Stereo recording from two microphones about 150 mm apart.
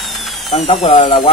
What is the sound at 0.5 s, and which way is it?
Speech, 45° left (ahead or behind).